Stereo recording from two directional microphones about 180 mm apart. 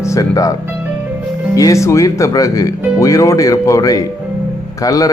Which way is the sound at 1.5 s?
15° left (ahead or behind).